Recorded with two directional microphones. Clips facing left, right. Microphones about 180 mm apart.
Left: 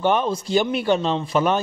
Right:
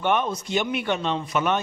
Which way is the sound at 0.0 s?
30° left (ahead or behind).